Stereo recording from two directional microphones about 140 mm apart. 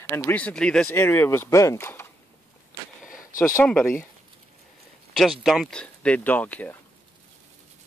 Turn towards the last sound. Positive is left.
turn(degrees=10)  # may be behind; listen again after turning